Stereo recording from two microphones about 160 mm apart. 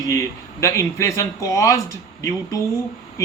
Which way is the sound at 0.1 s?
20° left (ahead or behind).